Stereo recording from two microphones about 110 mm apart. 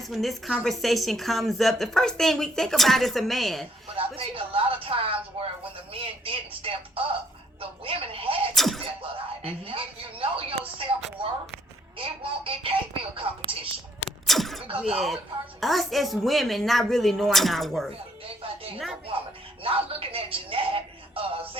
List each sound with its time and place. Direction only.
0.0 s a woman's voice: centre (ahead or behind)
3.9 s speech: 55° right (ahead or behind)
8.5 s a woman's voice: centre (ahead or behind)
8.8 s speech: 60° right (ahead or behind)
11.9 s speech: 55° right (ahead or behind)
14.3 s a sound: centre (ahead or behind)
14.8 s a woman's voice: 5° right (ahead or behind)
18.4 s speech: 55° right (ahead or behind)
19.6 s speech: 55° right (ahead or behind)